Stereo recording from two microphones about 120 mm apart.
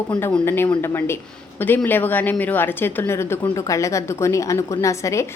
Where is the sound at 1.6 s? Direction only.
15° left (ahead or behind).